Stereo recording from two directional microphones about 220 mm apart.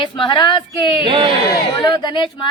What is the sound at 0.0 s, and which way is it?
Speech, 20° left (ahead or behind).